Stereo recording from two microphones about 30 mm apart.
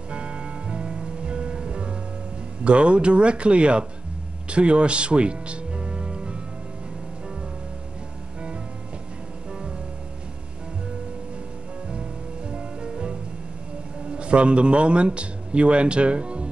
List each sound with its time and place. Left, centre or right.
0.1 s music: right
2.6 s a man's voice: right
4.5 s music: right
11.9 s music: right
14.1 s a man's voice: right